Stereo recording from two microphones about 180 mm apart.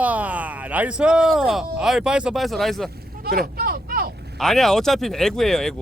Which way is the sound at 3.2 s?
60° right (ahead or behind).